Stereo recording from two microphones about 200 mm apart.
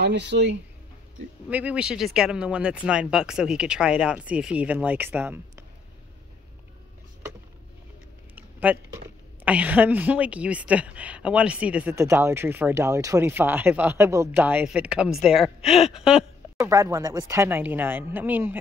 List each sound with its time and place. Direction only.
0.0 s speech: 60° right (ahead or behind)
1.5 s speech: 5° right (ahead or behind)
8.4 s a sound: 10° right (ahead or behind)
9.4 s a woman's voice: 5° right (ahead or behind)
16.5 s a woman's voice: 15° right (ahead or behind)